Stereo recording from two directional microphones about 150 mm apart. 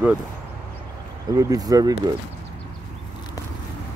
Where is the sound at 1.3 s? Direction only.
25° right (ahead or behind).